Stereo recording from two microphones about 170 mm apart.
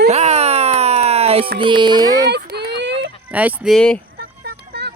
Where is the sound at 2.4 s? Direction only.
70° right (ahead or behind); by 3.1 s 90° right.